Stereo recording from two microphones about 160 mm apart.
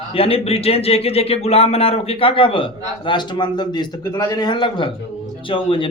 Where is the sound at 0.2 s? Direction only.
35° left (ahead or behind).